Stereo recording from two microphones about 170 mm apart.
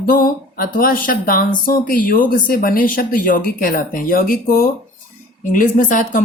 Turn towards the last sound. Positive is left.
turn(degrees=50)  # may be behind; listen again after turning